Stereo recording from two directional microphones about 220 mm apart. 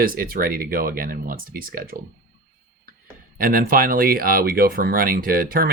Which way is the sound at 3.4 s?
40° right (ahead or behind).